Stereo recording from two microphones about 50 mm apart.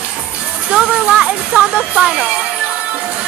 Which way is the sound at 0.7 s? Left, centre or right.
Right.